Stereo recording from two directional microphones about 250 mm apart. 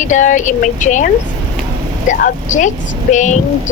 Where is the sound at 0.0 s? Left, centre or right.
Left.